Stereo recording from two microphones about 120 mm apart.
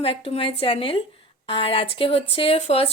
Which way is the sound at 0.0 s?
50° left (ahead or behind).